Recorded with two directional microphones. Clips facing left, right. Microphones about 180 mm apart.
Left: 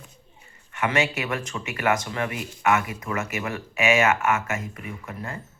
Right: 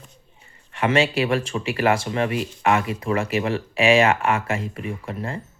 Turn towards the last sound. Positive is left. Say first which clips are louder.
# right 5 dB
turn(degrees=-30)  # may be behind; listen again after turning